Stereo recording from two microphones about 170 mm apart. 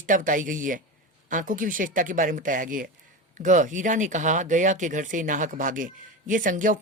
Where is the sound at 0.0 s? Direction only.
50° right (ahead or behind).